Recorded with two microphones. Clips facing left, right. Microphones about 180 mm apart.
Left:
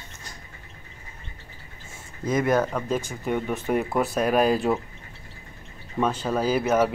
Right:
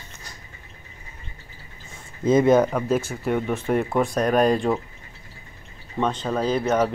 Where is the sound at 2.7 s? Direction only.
5° right (ahead or behind).